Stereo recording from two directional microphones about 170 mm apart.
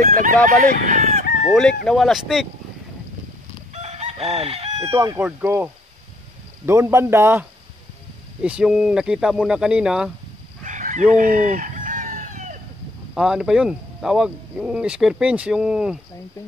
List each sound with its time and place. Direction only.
0.0 s speech: 55° right (ahead or behind)
1.5 s speech: 5° left (ahead or behind)
3.7 s chicken: 40° right (ahead or behind)
4.8 s speech: 15° right (ahead or behind)
10.6 s chicken: 50° right (ahead or behind)
13.1 s speech: 5° right (ahead or behind)